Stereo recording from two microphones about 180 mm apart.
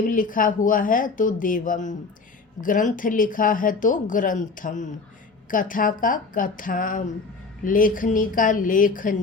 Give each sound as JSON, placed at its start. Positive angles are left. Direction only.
{"t": 0.1, "sound": "speech", "side_deg": 50}